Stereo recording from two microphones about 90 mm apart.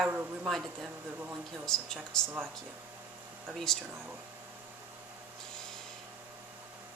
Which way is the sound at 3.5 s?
5° left (ahead or behind).